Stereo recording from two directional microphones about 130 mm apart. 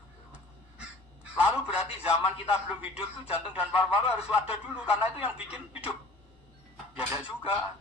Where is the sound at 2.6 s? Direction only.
10° right (ahead or behind).